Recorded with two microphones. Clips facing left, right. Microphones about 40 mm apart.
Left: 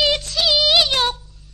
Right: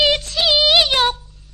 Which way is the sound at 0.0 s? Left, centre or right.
Centre.